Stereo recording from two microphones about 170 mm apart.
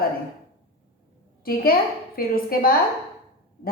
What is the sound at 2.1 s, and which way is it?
Speech, 60° left (ahead or behind).